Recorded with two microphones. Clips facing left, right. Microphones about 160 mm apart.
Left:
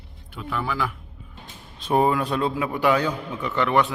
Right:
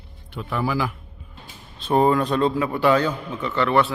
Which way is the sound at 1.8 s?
10° left (ahead or behind).